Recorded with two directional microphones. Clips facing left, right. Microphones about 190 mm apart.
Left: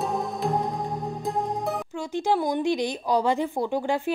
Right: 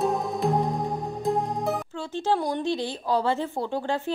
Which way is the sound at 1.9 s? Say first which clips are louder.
Left 5 dB; 15° left (ahead or behind).